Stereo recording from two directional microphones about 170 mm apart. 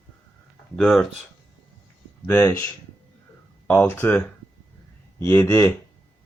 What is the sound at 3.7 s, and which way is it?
Speech, 10° left (ahead or behind).